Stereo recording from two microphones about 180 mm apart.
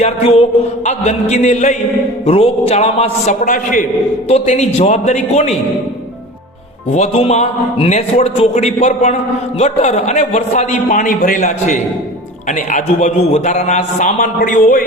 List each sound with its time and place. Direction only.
0.0 s a man's voice: 35° left (ahead or behind)
6.9 s a man's voice: 35° left (ahead or behind)